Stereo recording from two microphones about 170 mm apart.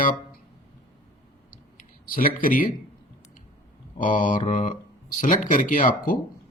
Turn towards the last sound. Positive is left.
turn(degrees=50)  # may be behind; listen again after turning